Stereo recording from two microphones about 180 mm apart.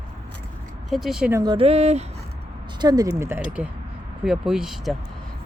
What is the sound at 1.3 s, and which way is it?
Speech, 25° right (ahead or behind).